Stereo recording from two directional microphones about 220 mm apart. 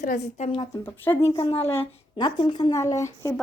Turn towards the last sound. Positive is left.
turn(degrees=15)  # may be behind; listen again after turning